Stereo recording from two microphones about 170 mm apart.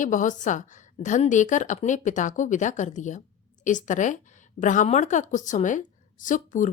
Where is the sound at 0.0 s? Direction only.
50° left (ahead or behind).